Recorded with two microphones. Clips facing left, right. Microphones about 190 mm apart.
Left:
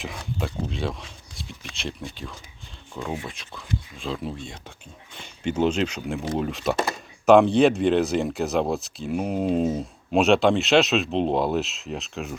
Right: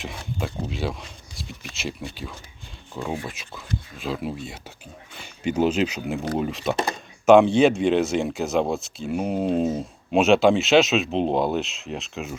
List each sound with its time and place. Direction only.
0.0 s speech: centre (ahead or behind)